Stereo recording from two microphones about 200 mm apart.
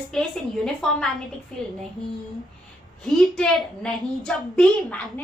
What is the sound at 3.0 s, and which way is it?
A woman's voice, centre (ahead or behind).